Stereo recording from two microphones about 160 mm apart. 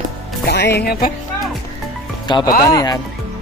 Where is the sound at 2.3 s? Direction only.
25° left (ahead or behind).